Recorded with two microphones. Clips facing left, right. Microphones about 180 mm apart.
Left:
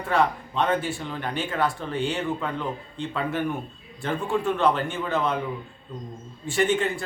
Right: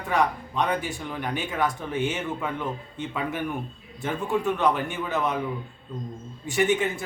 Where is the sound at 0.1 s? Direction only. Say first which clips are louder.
Left 1 dB; 15° right (ahead or behind).